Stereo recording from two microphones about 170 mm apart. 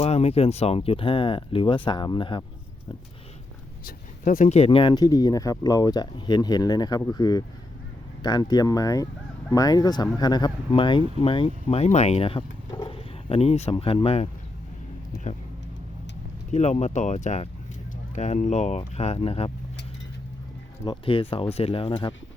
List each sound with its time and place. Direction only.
0.0 s speech: 35° left (ahead or behind)
4.2 s speech: 45° left (ahead or behind)
16.5 s speech: 40° left (ahead or behind)
20.8 s speech: 30° left (ahead or behind)